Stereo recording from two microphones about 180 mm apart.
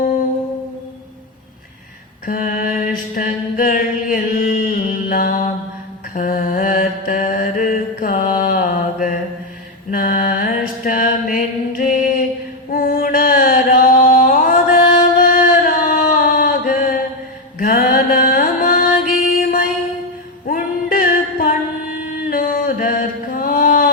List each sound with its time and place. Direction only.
2.2 s mantra: 50° left (ahead or behind)
12.7 s a sound: 50° left (ahead or behind)
17.6 s music: 50° left (ahead or behind)
22.3 s mantra: 50° left (ahead or behind)